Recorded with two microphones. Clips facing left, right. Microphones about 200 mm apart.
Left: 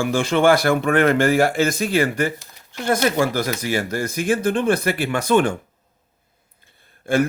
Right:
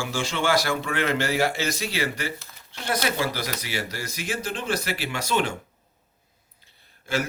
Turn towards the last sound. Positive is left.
turn(degrees=55)  # may be behind; listen again after turning